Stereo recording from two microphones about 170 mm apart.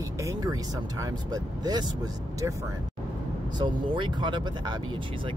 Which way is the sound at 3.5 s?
30° right (ahead or behind).